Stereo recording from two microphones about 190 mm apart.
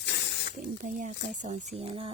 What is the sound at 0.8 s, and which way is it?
Speech, 40° right (ahead or behind).